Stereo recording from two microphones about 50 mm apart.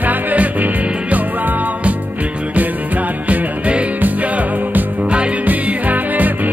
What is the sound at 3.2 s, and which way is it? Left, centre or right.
Music, right.